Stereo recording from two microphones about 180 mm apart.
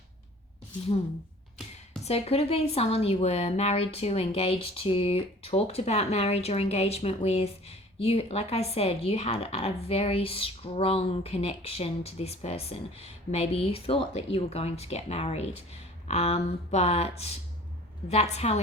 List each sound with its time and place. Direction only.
2.0 s a woman's voice: 35° left (ahead or behind)